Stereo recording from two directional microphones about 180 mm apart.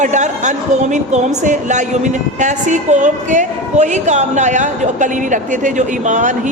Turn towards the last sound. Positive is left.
turn(degrees=-45)  # may be behind; listen again after turning